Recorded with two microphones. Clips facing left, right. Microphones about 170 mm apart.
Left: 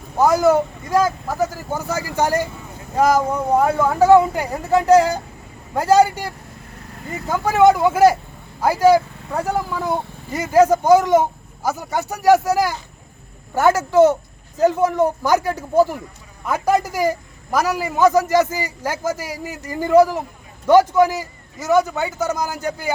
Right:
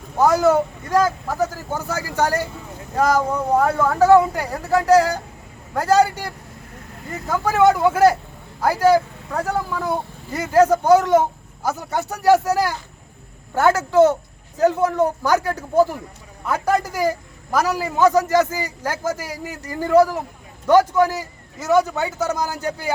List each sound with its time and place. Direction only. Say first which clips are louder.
0.2 s speech: left 1 dB; 10° left (ahead or behind)